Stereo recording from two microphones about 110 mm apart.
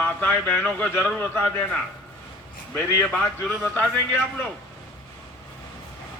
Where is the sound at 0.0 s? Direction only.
15° left (ahead or behind).